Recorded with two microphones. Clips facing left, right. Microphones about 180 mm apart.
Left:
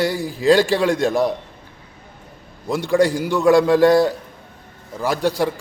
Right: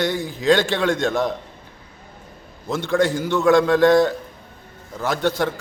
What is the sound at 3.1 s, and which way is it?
Speech, 10° left (ahead or behind).